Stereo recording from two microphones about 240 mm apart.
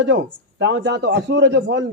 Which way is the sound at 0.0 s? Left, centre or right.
Right.